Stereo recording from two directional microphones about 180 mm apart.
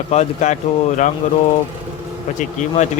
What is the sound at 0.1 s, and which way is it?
Speech, 40° left (ahead or behind).